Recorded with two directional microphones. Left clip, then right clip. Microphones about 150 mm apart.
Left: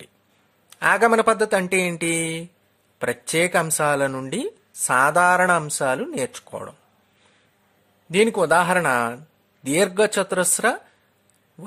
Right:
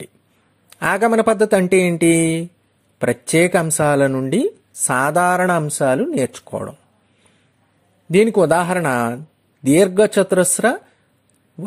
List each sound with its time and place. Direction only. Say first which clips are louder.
0.7 s speech: even; 25° right (ahead or behind)
8.1 s speech: right 4 dB; 20° right (ahead or behind)